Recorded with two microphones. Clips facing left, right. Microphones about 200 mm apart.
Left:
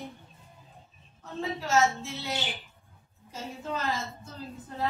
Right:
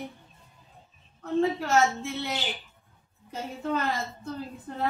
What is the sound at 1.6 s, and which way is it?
Speech, 60° right (ahead or behind).